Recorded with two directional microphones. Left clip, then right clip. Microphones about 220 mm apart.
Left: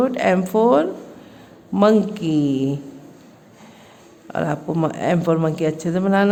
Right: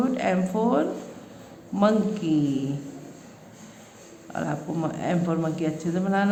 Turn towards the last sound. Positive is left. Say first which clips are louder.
# left 7 dB
turn(degrees=45)  # may be behind; listen again after turning